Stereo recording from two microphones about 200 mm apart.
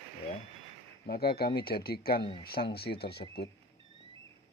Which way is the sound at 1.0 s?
50° left (ahead or behind).